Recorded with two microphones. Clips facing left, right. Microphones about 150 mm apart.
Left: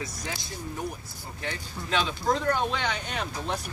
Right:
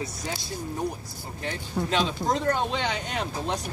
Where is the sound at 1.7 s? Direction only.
35° right (ahead or behind).